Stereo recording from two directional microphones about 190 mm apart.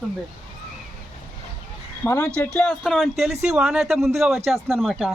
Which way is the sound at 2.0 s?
15° left (ahead or behind).